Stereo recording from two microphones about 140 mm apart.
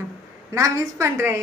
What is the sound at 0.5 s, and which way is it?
Speech, 20° right (ahead or behind).